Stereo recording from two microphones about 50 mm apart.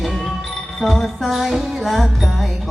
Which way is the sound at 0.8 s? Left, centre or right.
Centre.